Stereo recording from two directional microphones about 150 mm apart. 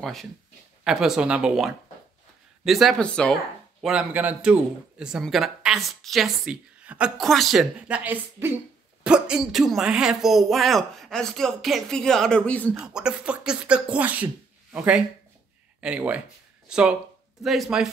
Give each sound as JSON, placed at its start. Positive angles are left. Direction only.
{"t": 0.0, "sound": "a man's voice", "side_deg": 0}
{"t": 3.8, "sound": "a man's voice", "side_deg": -5}
{"t": 12.7, "sound": "a man's voice", "side_deg": -5}